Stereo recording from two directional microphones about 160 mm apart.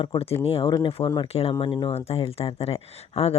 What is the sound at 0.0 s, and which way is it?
Speech, 35° left (ahead or behind).